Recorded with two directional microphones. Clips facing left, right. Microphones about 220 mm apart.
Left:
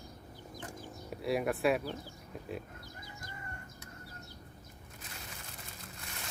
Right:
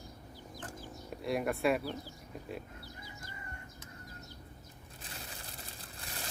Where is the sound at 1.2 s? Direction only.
Centre (ahead or behind).